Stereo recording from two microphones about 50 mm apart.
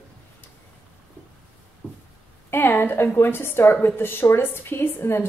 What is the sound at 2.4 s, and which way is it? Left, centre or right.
A woman's voice, left.